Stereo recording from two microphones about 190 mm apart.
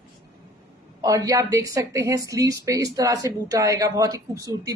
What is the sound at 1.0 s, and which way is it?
Speech, 20° right (ahead or behind).